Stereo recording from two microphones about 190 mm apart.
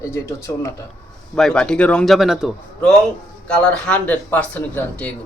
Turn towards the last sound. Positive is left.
turn(degrees=5)  # may be behind; listen again after turning